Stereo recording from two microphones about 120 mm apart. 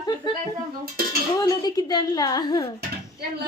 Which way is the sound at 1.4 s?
30° left (ahead or behind).